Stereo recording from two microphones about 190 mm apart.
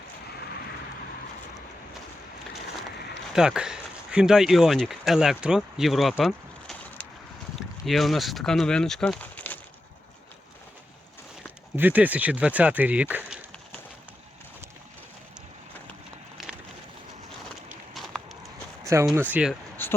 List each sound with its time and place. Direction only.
3.3 s speech: 5° right (ahead or behind)
11.8 s speech: 10° right (ahead or behind)
16.4 s a sound: centre (ahead or behind)
17.9 s a sound: centre (ahead or behind)
18.9 s speech: 15° right (ahead or behind)
19.3 s speech: 5° right (ahead or behind)
19.8 s speech: 10° left (ahead or behind)